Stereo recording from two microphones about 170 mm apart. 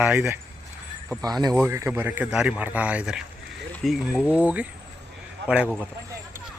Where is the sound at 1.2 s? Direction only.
25° right (ahead or behind); by 5.8 s 5° right (ahead or behind).